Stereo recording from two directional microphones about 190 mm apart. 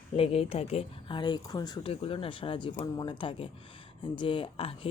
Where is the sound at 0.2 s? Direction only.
30° left (ahead or behind).